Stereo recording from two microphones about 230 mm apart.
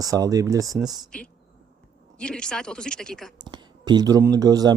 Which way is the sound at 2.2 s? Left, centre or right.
Centre.